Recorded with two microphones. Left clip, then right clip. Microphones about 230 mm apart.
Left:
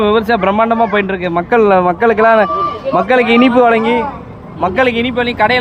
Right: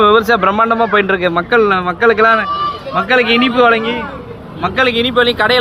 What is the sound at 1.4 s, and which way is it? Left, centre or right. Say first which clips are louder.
A man's voice: left 5 dB; centre.